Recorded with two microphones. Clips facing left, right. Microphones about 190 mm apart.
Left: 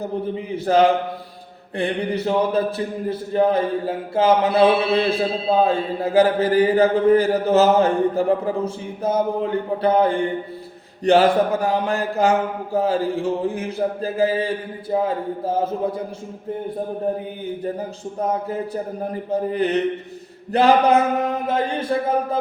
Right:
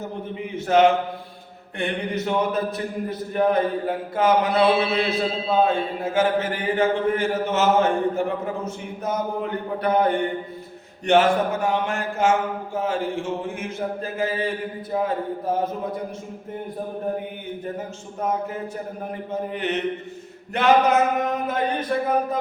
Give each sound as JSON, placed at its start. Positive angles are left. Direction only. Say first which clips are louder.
{"t": 0.3, "sound": "a man's voice", "louder": "left 1 dB", "side_deg": 35}
{"t": 18.2, "sound": "a man's voice", "louder": "left 2 dB", "side_deg": 35}